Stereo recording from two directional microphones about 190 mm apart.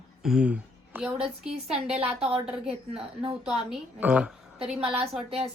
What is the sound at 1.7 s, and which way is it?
A woman's voice, 30° right (ahead or behind).